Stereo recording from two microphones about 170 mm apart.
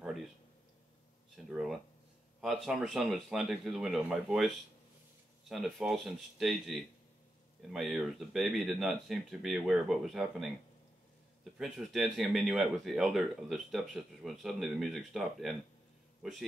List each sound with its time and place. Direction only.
1.3 s a sound: centre (ahead or behind)
2.4 s speech: centre (ahead or behind)
5.5 s speech: centre (ahead or behind)
11.5 s a man's voice: centre (ahead or behind)